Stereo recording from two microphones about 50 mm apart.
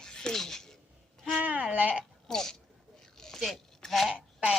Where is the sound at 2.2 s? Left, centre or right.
Centre.